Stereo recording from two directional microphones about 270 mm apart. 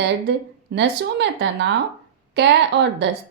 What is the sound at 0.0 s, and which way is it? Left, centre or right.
A woman's voice, right.